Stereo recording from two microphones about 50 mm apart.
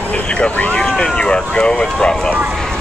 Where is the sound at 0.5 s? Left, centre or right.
Left.